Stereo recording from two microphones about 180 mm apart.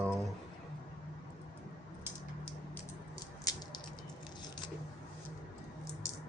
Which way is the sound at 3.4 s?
20° left (ahead or behind).